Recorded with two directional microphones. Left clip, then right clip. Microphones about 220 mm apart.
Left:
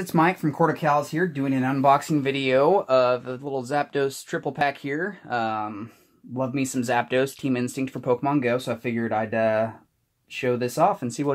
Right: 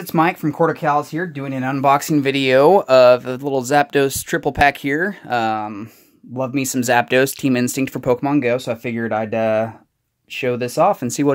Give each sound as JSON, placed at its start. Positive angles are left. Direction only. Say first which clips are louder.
{"t": 0.0, "sound": "speech", "louder": "right 4 dB", "side_deg": -40}